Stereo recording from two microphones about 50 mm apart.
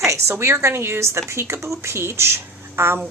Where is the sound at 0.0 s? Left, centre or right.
Right.